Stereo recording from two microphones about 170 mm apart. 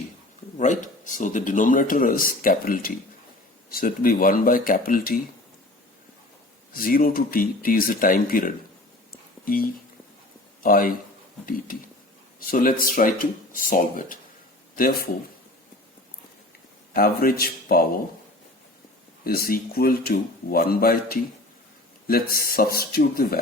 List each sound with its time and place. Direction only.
0.5 s speech: 45° left (ahead or behind)
6.7 s speech: 60° left (ahead or behind)
16.9 s speech: 60° left (ahead or behind)
19.2 s speech: 60° left (ahead or behind)